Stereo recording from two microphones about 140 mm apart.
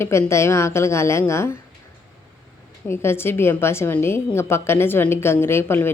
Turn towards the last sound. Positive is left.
turn(degrees=15)  # may be behind; listen again after turning